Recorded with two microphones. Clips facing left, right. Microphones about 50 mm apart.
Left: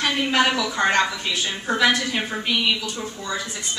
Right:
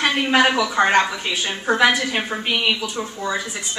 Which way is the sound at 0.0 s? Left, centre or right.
Right.